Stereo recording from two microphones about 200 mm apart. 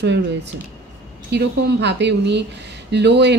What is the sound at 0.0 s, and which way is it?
Speech, 60° right (ahead or behind).